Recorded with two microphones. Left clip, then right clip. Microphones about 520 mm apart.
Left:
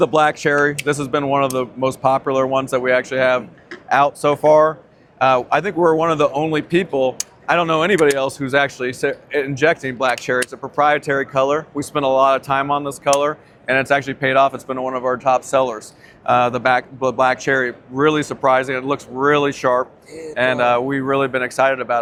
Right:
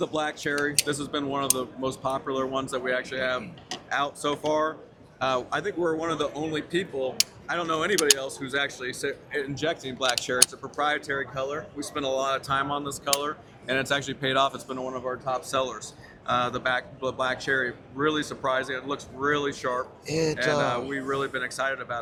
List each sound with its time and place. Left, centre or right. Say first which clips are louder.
0.0 s speech: left 13 dB; left